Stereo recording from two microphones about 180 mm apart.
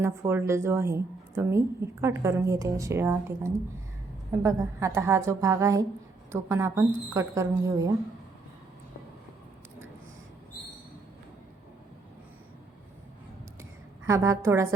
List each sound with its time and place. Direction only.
0.0 s a woman's voice: 15° right (ahead or behind)
14.1 s a woman's voice: 15° right (ahead or behind)